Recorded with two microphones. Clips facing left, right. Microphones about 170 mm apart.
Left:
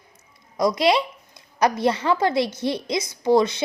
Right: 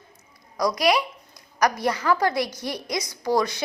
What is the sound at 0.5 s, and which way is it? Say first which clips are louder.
Speech: left 2 dB; 25° left (ahead or behind).